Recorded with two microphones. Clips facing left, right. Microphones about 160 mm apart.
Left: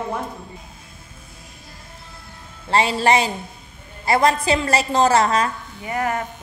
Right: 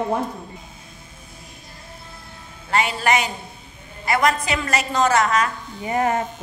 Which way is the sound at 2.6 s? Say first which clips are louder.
Left 3 dB; 30° left (ahead or behind).